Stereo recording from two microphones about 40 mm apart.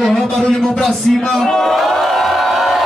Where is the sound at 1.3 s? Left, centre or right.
Centre.